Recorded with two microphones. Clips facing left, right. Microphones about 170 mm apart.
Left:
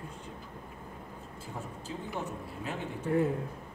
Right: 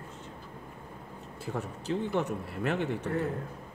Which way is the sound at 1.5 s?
70° right (ahead or behind).